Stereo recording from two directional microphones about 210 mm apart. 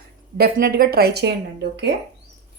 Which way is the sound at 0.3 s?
45° right (ahead or behind).